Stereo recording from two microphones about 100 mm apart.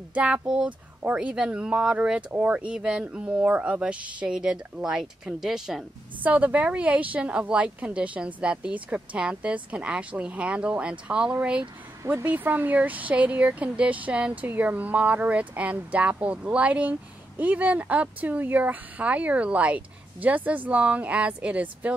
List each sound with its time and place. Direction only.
0.1 s speech: 10° right (ahead or behind)